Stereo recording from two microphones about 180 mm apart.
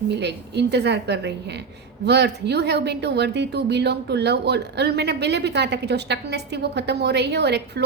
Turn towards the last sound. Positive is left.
turn(degrees=-65)  # may be behind; listen again after turning